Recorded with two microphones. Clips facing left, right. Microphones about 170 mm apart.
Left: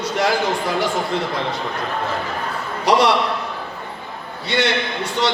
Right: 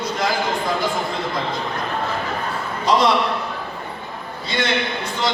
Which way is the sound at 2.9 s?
75° left (ahead or behind).